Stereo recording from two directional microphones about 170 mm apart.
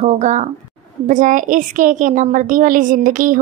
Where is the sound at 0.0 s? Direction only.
40° right (ahead or behind).